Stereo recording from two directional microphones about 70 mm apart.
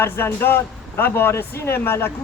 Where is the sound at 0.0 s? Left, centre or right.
Left.